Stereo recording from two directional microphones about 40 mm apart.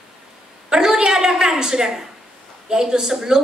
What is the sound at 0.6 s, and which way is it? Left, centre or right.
A woman's voice, centre.